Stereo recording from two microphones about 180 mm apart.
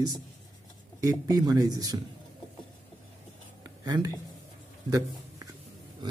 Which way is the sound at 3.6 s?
20° right (ahead or behind).